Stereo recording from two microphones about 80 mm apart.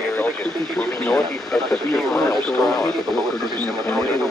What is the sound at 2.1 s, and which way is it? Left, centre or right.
Speech, left.